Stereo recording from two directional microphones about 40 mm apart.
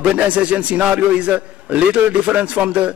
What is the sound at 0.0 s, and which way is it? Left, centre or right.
A man's voice, right.